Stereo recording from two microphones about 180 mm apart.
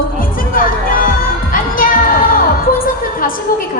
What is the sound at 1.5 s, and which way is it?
Children playing, 50° left (ahead or behind).